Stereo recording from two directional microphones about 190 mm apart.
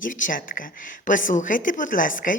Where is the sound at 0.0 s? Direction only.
45° left (ahead or behind).